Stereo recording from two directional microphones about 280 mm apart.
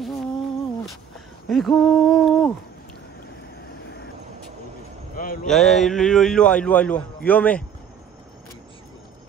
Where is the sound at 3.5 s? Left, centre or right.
Left.